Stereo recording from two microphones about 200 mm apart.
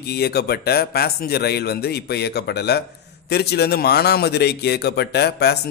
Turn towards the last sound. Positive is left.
turn(degrees=55)  # may be behind; listen again after turning